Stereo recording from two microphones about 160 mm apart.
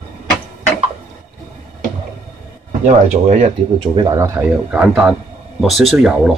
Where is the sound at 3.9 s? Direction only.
25° right (ahead or behind).